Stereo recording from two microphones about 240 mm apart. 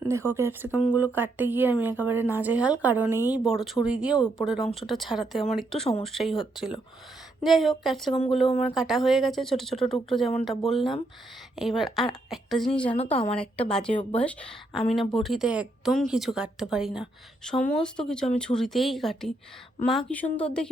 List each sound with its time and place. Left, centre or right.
0.1 s a woman's voice: centre
12.9 s a woman's voice: left
13.3 s speech: centre